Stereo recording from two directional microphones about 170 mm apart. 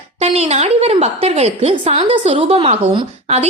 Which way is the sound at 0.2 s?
40° right (ahead or behind).